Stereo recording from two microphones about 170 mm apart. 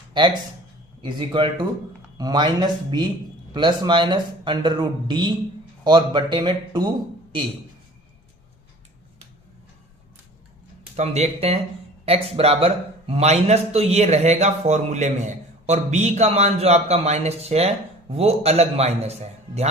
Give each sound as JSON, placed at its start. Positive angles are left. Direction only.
{"t": 1.0, "sound": "speech", "side_deg": -30}
{"t": 10.9, "sound": "a man's voice", "side_deg": -40}